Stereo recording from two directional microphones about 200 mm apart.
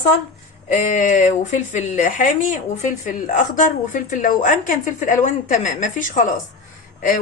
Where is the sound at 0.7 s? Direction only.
40° left (ahead or behind).